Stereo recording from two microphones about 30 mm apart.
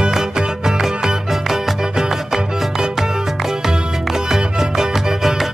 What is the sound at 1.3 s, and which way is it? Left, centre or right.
Music, centre.